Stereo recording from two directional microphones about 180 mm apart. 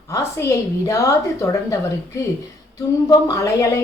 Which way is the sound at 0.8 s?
20° left (ahead or behind).